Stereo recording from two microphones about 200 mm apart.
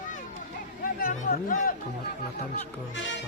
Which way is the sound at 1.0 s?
45° left (ahead or behind).